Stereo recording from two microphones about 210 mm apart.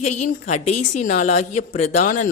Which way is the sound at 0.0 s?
35° left (ahead or behind).